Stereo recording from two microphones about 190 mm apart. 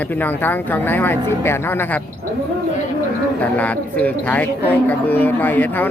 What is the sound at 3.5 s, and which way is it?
Speech, 10° left (ahead or behind).